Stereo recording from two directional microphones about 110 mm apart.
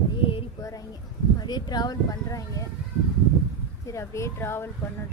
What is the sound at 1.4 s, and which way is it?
Speech, 40° left (ahead or behind).